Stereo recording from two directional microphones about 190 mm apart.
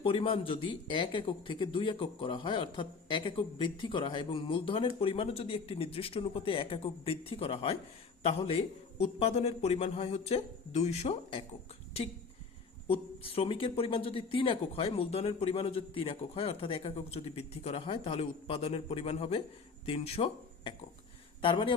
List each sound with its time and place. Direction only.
0.0 s a man's voice: 30° left (ahead or behind)
12.9 s speech: 30° left (ahead or behind)